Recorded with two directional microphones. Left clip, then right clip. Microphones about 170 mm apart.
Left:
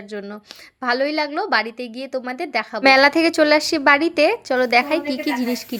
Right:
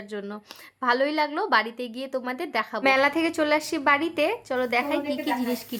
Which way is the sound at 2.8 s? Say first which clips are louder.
Left 9 dB; 30° left (ahead or behind).